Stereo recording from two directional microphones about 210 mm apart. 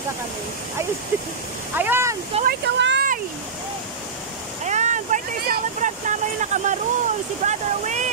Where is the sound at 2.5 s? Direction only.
55° right (ahead or behind).